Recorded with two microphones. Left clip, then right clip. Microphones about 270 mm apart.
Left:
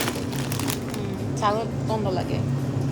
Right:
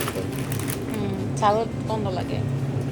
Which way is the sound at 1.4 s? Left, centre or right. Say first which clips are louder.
Right 3 dB; centre.